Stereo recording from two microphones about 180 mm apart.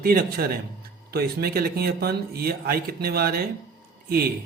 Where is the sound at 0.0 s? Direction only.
55° right (ahead or behind).